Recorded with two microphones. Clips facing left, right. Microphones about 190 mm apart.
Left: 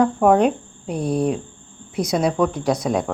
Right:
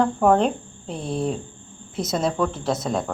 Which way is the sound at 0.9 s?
25° right (ahead or behind).